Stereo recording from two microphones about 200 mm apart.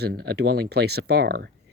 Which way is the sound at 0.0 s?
55° right (ahead or behind).